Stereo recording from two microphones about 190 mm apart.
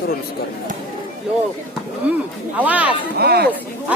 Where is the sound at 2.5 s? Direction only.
10° right (ahead or behind).